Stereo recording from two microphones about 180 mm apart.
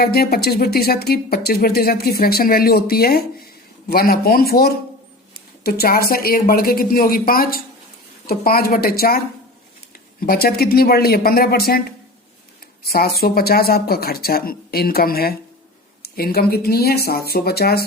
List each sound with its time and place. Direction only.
0.0 s speech: 60° left (ahead or behind)